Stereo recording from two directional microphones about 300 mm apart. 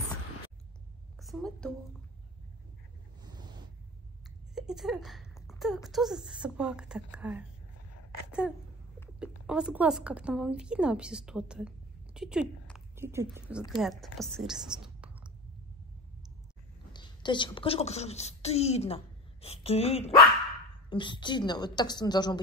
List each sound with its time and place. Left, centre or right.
1.2 s a woman's voice: centre
3.2 s a sound: centre
4.6 s speech: centre
8.3 s a sound: centre
9.2 s speech: centre
16.9 s a woman's voice: centre